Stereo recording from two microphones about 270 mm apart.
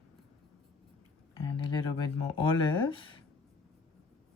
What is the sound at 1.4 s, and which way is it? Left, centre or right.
Speech, centre.